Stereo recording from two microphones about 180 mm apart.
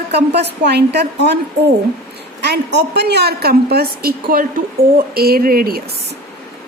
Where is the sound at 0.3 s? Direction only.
70° right (ahead or behind).